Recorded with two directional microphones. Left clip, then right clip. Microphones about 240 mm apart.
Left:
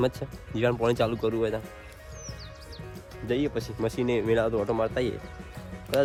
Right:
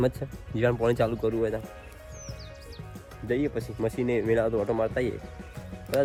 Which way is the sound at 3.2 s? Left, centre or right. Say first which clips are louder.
Even; centre.